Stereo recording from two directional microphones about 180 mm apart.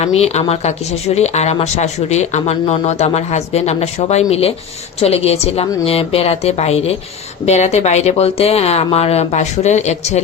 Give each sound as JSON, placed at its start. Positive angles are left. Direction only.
{"t": 0.0, "sound": "speech", "side_deg": 35}